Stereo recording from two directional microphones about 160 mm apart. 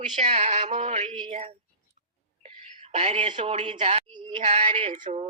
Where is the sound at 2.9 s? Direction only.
35° right (ahead or behind).